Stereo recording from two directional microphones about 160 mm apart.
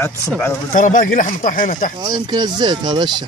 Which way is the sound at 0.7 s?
55° left (ahead or behind).